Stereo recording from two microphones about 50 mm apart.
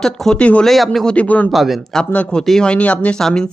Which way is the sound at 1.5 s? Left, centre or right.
Centre.